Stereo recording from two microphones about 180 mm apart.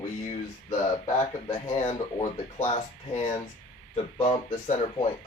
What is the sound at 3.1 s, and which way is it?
Speech, 40° left (ahead or behind).